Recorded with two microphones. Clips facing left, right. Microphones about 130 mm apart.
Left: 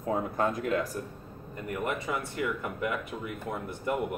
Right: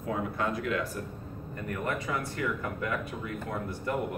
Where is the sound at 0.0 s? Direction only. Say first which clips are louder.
Left 3 dB; 40° left (ahead or behind).